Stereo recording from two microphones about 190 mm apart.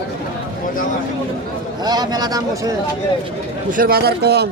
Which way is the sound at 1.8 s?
20° right (ahead or behind).